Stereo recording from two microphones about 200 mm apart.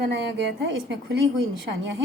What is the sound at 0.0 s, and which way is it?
A woman's voice, 60° right (ahead or behind).